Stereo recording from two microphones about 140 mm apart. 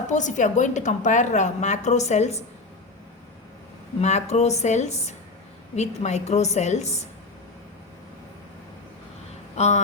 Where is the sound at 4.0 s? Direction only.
55° left (ahead or behind).